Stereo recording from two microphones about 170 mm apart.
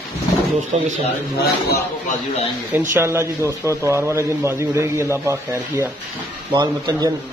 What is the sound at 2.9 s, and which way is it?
A man's voice, 15° right (ahead or behind).